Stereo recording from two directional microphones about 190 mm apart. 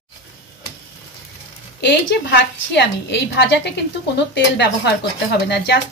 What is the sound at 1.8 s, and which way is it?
A woman's voice, 65° left (ahead or behind).